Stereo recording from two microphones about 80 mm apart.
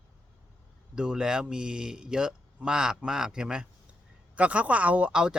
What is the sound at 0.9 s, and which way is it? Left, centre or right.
Speech, centre.